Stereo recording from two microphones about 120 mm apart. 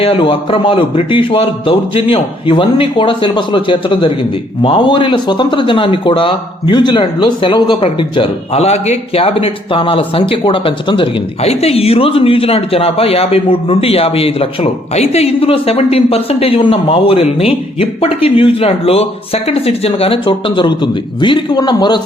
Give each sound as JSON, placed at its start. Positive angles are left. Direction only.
{"t": 0.0, "sound": "a man's voice", "side_deg": 50}
{"t": 8.5, "sound": "a man's voice", "side_deg": 65}